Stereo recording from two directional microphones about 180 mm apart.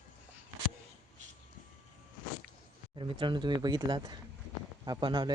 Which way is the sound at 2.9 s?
25° right (ahead or behind).